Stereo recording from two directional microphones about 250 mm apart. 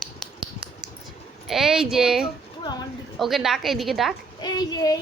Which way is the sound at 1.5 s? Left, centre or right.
Centre.